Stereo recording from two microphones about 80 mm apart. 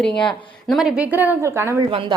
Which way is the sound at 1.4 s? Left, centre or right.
Right.